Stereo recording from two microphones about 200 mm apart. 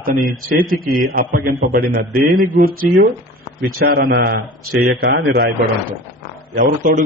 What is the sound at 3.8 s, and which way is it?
A man's voice, 45° right (ahead or behind).